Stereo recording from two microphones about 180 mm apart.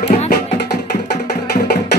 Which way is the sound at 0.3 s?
65° left (ahead or behind).